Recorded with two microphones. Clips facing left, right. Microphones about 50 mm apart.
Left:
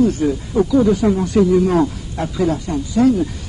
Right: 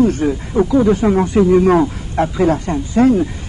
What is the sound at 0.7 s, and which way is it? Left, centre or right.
Speech, right.